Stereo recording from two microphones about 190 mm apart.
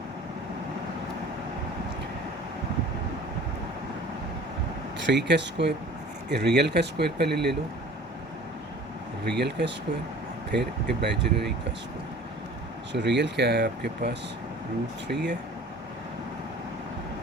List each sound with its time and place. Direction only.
5.0 s speech: 65° right (ahead or behind)
9.2 s speech: 60° right (ahead or behind)
12.9 s speech: 65° right (ahead or behind)